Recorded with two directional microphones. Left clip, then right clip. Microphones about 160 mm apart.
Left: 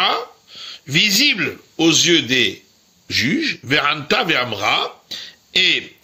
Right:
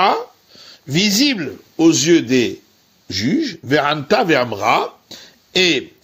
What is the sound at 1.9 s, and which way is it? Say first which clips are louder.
Speech: right 1 dB; 55° right (ahead or behind).